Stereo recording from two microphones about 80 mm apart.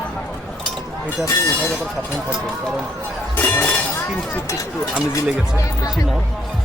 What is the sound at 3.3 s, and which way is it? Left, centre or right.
Chink, left.